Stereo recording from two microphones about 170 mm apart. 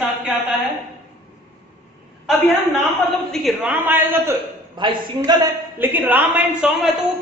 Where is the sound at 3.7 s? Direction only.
10° right (ahead or behind).